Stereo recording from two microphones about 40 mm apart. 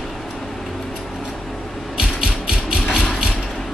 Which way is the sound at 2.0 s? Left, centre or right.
Centre.